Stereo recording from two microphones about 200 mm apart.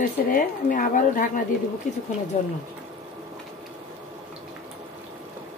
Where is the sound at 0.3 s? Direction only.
40° left (ahead or behind).